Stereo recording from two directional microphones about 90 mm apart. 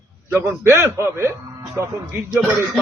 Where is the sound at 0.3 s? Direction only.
20° right (ahead or behind).